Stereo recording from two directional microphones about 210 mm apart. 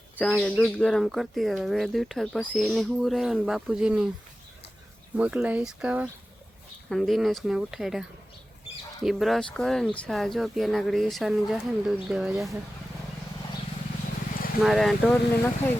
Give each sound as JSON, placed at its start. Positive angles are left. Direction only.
{"t": 0.2, "sound": "speech", "side_deg": 5}
{"t": 5.1, "sound": "speech", "side_deg": -5}
{"t": 9.0, "sound": "speech", "side_deg": 0}
{"t": 14.3, "sound": "a sound", "side_deg": 45}
{"t": 14.6, "sound": "speech", "side_deg": 0}